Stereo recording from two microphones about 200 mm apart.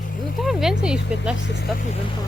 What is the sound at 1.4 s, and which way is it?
Speech, 60° left (ahead or behind).